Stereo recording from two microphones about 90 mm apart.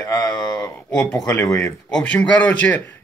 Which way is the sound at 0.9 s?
10° left (ahead or behind).